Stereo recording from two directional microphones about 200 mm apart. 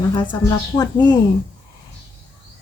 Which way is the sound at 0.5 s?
20° left (ahead or behind).